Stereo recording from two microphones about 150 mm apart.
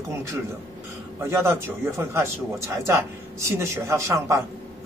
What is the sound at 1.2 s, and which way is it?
A man's voice, 20° right (ahead or behind).